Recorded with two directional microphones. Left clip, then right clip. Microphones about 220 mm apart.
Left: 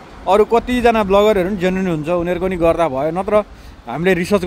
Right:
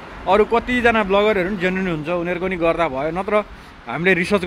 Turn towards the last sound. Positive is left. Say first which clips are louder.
# left 1 dB
turn(degrees=10)  # may be behind; listen again after turning